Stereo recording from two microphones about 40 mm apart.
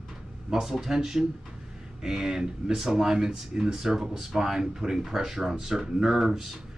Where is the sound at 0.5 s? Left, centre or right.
Centre.